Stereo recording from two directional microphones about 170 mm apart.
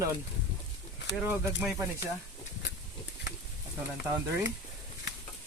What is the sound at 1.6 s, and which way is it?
Speech, 5° right (ahead or behind).